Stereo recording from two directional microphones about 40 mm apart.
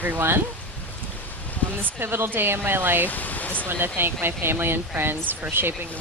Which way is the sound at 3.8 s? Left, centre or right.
Right.